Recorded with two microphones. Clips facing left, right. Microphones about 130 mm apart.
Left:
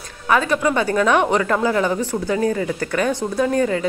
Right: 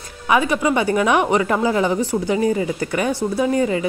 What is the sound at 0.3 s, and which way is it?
Speech, 15° right (ahead or behind).